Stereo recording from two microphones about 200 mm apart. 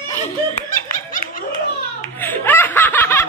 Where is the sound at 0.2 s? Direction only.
40° left (ahead or behind).